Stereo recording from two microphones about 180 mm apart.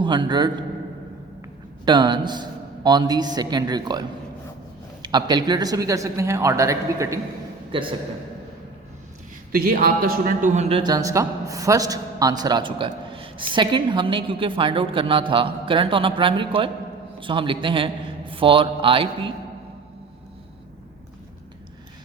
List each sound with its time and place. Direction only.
0.0 s a man's voice: 25° right (ahead or behind)
1.8 s a man's voice: 25° right (ahead or behind)
5.0 s speech: 25° right (ahead or behind)
7.7 s a man's voice: 30° right (ahead or behind)
9.5 s a man's voice: 55° right (ahead or behind); by 19.3 s 30° right (ahead or behind)